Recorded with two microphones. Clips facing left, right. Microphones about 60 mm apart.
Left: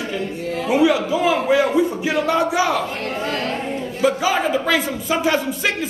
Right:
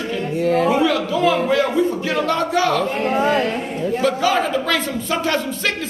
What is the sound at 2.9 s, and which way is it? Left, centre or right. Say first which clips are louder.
Speech: right 6 dB; right.